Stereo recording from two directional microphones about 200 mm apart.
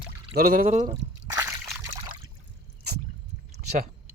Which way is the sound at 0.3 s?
45° right (ahead or behind).